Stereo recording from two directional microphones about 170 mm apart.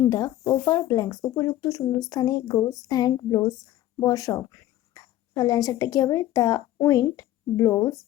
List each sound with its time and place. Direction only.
0.0 s speech: 20° left (ahead or behind)